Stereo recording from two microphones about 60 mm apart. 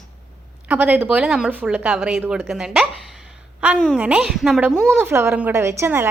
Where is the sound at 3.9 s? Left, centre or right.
Centre.